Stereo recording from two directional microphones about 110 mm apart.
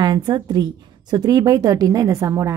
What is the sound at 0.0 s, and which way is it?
A woman's voice, 40° right (ahead or behind).